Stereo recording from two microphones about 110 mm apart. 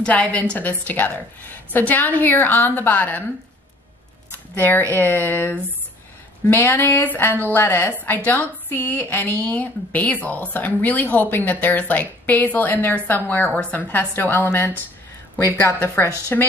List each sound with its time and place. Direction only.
0.0 s a woman's voice: 10° left (ahead or behind)
4.6 s a woman's voice: 15° left (ahead or behind)